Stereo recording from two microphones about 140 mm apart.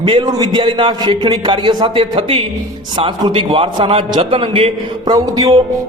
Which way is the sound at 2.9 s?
30° right (ahead or behind).